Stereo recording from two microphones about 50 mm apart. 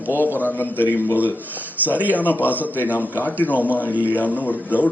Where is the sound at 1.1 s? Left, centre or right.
Right.